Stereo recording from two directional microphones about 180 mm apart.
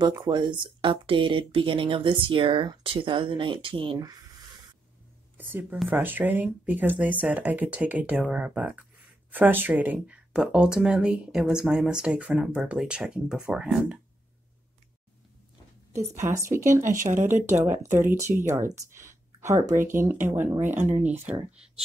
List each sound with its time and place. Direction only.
0.0 s speech: 25° right (ahead or behind)
5.4 s speech: 10° right (ahead or behind)
15.9 s speech: 15° right (ahead or behind)
16.8 s speech: 45° right (ahead or behind)
17.6 s speech: 15° right (ahead or behind)